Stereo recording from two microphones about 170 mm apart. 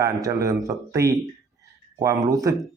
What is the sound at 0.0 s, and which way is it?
Speech, 20° right (ahead or behind).